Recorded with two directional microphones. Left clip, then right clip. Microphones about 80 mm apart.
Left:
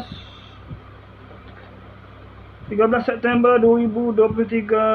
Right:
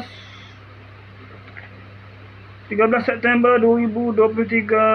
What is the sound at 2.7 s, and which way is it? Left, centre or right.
Mantra, centre.